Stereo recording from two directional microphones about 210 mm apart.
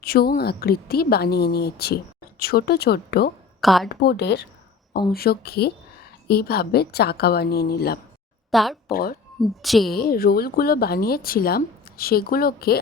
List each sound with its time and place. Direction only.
0.0 s speech: 45° left (ahead or behind)
3.6 s a woman's voice: centre (ahead or behind)
3.8 s speech: 50° left (ahead or behind)
8.4 s speech: centre (ahead or behind)
8.9 s speech: 45° left (ahead or behind)
9.4 s speech: centre (ahead or behind)
9.9 s speech: 45° left (ahead or behind)